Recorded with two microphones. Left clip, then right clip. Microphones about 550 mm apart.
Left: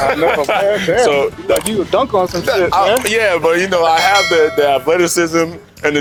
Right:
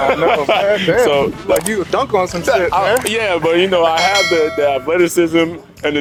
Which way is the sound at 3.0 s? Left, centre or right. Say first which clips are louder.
Left 2 dB; left.